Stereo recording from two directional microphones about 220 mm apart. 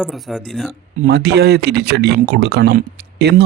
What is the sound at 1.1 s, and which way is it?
A man's voice, 50° right (ahead or behind).